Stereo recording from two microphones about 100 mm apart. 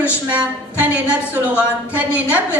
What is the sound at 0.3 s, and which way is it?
A woman's voice, 15° right (ahead or behind).